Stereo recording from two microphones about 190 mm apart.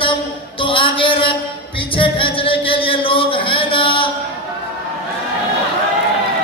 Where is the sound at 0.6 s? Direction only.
25° left (ahead or behind).